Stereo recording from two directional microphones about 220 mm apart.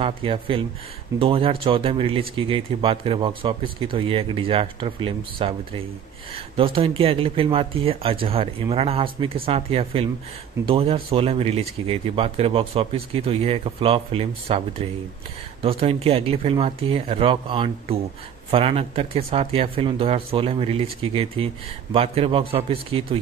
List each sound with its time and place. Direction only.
0.0 s speech: 25° right (ahead or behind)